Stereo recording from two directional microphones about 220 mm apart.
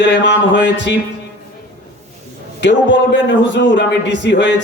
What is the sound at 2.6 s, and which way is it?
A man's voice, 55° left (ahead or behind).